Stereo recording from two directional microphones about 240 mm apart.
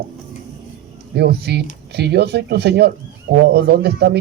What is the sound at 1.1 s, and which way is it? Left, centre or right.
Speech, right.